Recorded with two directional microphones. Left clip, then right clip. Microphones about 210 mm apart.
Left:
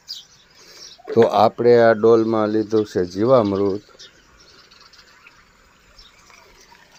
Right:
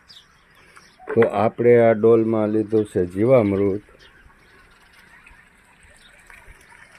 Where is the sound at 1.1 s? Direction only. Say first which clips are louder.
Left 4 dB; 20° left (ahead or behind).